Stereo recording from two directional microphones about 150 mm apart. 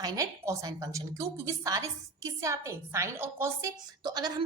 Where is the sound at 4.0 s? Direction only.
30° right (ahead or behind).